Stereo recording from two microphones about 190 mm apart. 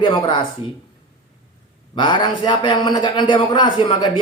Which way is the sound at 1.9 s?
25° left (ahead or behind).